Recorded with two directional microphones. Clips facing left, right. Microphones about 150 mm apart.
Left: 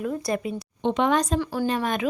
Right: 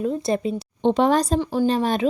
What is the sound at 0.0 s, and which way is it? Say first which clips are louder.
A woman's voice: right 4 dB; 25° right (ahead or behind).